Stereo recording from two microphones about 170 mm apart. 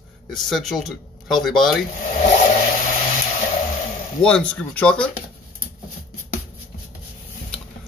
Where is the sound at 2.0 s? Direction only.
45° left (ahead or behind).